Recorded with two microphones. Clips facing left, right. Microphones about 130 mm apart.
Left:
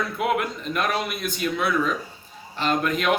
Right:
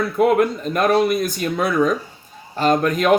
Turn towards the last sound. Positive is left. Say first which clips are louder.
# right 6 dB
turn(degrees=-40)  # may be behind; listen again after turning